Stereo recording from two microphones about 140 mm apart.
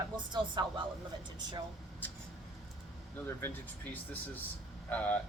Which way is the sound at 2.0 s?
10° left (ahead or behind).